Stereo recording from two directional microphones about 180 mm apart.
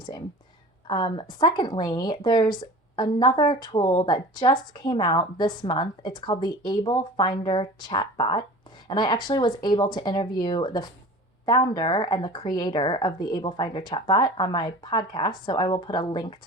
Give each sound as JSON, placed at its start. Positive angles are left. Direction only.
{"t": 0.9, "sound": "a woman's voice", "side_deg": 25}